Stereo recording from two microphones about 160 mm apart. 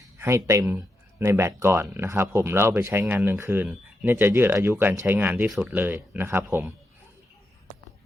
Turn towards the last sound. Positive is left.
turn(degrees=-10)  # may be behind; listen again after turning